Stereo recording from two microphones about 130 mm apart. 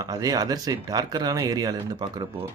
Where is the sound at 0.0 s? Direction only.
30° right (ahead or behind).